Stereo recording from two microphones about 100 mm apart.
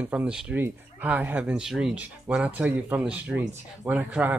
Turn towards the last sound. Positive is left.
turn(degrees=-15)  # may be behind; listen again after turning